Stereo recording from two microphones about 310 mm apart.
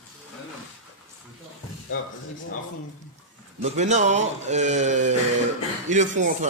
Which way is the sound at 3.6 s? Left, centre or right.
Right.